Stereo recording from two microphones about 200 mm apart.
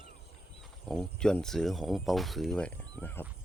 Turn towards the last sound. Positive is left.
turn(degrees=10)  # may be behind; listen again after turning